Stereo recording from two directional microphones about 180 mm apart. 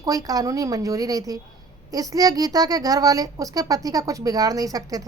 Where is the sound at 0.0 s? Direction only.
20° right (ahead or behind).